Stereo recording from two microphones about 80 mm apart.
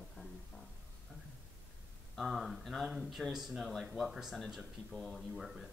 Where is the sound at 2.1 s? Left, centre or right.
Centre.